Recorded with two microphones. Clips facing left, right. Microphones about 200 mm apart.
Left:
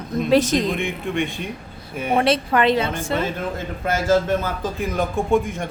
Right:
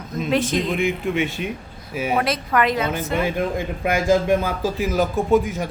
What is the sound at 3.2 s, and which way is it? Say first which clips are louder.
A man's voice: right 3 dB; 15° right (ahead or behind).